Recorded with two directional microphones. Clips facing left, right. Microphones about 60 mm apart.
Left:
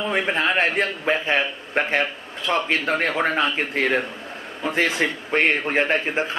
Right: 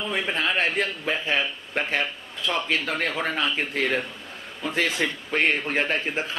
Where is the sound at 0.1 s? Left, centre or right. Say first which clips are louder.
Left 4 dB; left.